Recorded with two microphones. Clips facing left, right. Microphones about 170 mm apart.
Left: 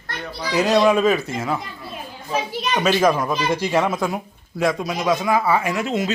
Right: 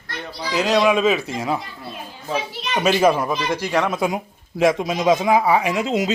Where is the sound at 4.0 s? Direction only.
15° right (ahead or behind).